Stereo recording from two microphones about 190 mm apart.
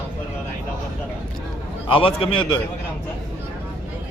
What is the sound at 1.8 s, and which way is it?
Speech, 25° left (ahead or behind).